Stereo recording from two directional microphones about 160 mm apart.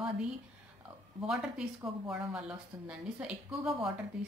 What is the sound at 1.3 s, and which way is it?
A woman's voice, 5° right (ahead or behind).